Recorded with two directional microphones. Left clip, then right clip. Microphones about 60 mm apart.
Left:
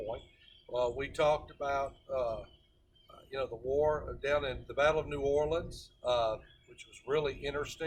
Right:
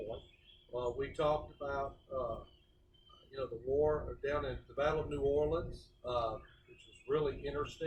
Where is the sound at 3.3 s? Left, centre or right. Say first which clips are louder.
Left 3 dB; left.